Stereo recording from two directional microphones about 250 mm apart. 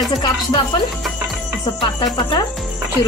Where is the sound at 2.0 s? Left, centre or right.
Centre.